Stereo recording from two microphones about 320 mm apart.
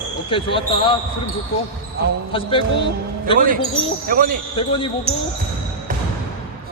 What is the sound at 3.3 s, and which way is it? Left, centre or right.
Speech, right.